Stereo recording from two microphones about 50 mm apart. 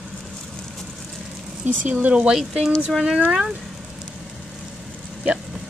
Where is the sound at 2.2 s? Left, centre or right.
Centre.